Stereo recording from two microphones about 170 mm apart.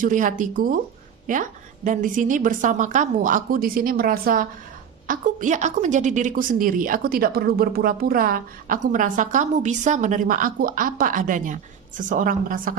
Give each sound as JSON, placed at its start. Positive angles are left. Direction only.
{"t": 0.0, "sound": "a woman's voice", "side_deg": -50}